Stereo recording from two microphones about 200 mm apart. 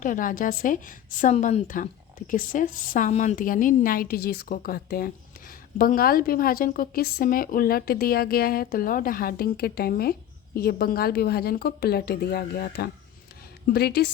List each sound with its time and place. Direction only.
0.0 s a woman's voice: 40° left (ahead or behind)